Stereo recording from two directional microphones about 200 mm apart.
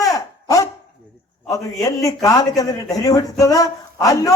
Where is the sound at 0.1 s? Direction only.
15° left (ahead or behind).